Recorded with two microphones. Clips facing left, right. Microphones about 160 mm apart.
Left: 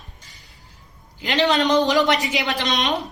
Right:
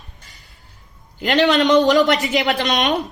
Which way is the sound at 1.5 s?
70° right (ahead or behind).